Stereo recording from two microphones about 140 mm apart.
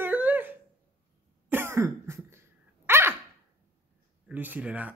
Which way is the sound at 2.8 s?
15° right (ahead or behind).